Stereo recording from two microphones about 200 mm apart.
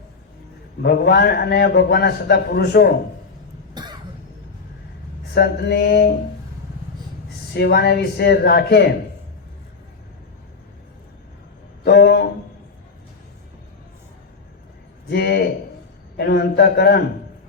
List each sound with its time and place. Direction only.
0.8 s a man's voice: 55° left (ahead or behind)
3.8 s cough: 20° right (ahead or behind)
5.3 s a man's voice: 55° left (ahead or behind)
7.5 s a man's voice: 55° left (ahead or behind)
11.9 s a man's voice: 55° left (ahead or behind)
15.1 s a man's voice: 55° left (ahead or behind)